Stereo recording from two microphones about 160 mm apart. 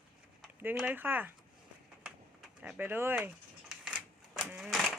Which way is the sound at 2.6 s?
10° right (ahead or behind).